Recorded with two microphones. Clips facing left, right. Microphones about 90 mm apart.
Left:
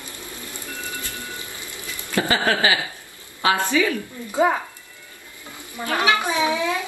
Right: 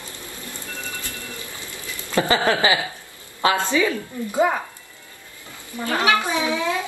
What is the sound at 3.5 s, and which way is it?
Speech, 30° right (ahead or behind).